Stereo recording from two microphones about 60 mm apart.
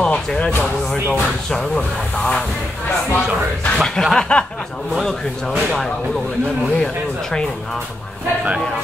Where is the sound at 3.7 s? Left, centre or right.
Centre.